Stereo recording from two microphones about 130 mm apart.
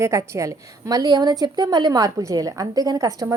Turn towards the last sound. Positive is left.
turn(degrees=-25)  # may be behind; listen again after turning